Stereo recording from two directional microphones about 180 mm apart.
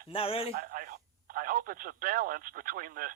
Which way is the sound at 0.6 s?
50° right (ahead or behind).